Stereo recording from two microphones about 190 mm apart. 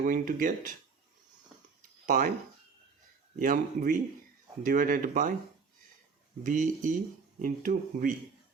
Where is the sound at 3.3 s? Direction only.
45° right (ahead or behind).